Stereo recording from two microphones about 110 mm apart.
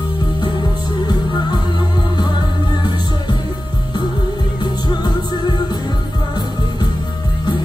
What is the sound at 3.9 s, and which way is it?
Music, 40° left (ahead or behind).